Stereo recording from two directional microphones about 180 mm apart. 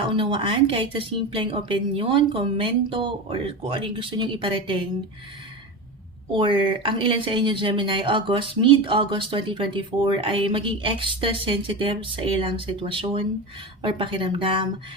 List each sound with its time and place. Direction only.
0.1 s speech: 30° right (ahead or behind)
6.3 s speech: 30° right (ahead or behind)